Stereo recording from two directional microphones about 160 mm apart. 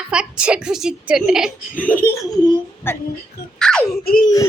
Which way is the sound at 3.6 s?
5° left (ahead or behind).